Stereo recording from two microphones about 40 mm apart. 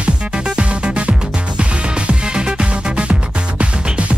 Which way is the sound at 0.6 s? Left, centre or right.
Right.